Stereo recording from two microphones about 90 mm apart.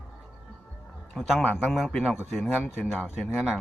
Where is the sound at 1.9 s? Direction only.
5° left (ahead or behind).